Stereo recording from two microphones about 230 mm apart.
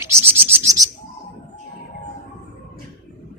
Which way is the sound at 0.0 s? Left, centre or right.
Centre.